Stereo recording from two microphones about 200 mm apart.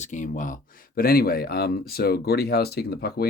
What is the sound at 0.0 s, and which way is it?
Speech, 40° left (ahead or behind).